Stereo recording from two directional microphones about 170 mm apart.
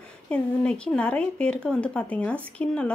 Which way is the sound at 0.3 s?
5° left (ahead or behind).